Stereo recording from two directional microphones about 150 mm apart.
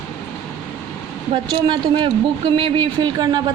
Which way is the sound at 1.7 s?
30° right (ahead or behind).